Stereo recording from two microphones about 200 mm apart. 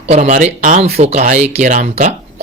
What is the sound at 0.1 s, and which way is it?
A man's voice, 40° right (ahead or behind).